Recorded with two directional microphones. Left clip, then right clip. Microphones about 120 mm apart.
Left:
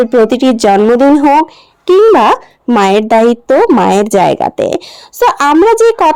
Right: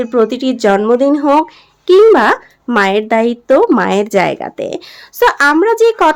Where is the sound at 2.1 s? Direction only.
45° left (ahead or behind).